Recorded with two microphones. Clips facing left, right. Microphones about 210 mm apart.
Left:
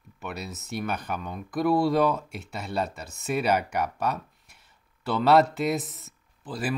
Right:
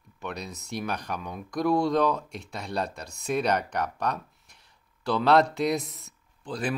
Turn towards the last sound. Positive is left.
turn(degrees=5)  # may be behind; listen again after turning